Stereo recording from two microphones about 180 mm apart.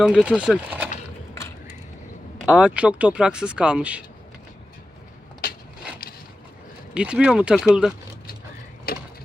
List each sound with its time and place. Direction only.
0.0 s speech: 5° right (ahead or behind)
2.4 s speech: 5° right (ahead or behind)
6.9 s speech: 5° right (ahead or behind)
8.9 s a sound: 55° left (ahead or behind)